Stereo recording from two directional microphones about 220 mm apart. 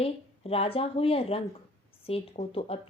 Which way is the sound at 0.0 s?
25° left (ahead or behind).